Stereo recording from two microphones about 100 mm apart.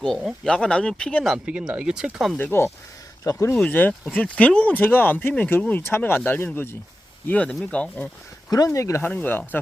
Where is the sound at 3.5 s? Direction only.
15° left (ahead or behind).